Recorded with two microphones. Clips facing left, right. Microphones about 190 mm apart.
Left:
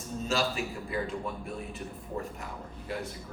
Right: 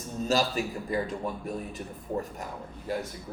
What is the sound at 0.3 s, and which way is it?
A man's voice, 40° right (ahead or behind).